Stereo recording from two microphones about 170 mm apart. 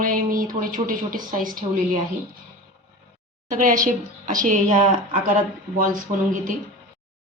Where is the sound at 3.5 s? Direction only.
50° right (ahead or behind).